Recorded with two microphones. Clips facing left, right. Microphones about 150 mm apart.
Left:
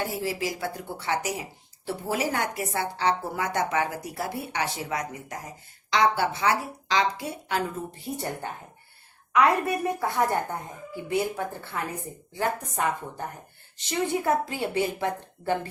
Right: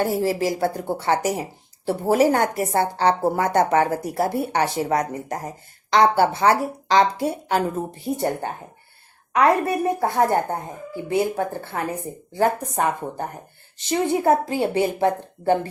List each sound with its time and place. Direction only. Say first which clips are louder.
0.0 s a woman's voice: right 8 dB; 40° right (ahead or behind)
11.7 s a woman's voice: right 6 dB; 40° right (ahead or behind)